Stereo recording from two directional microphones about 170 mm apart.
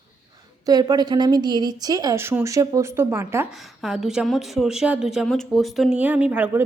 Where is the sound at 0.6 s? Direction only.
25° right (ahead or behind).